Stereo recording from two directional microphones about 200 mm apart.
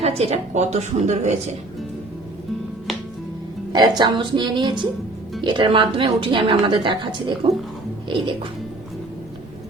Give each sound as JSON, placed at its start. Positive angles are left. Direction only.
{"t": 0.0, "sound": "a woman's voice", "side_deg": -30}
{"t": 3.7, "sound": "a woman's voice", "side_deg": -20}